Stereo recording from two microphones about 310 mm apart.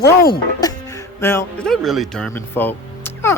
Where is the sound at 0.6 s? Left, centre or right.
Centre.